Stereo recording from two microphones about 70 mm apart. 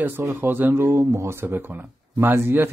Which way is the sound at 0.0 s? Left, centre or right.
Right.